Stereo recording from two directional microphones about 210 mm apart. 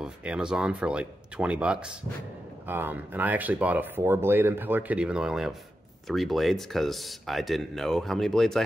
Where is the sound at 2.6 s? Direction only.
10° right (ahead or behind).